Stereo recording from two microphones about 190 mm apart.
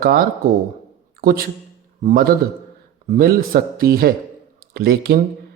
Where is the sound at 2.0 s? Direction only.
45° right (ahead or behind).